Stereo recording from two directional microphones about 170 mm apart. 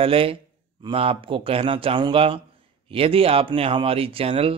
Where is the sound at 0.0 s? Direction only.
35° right (ahead or behind).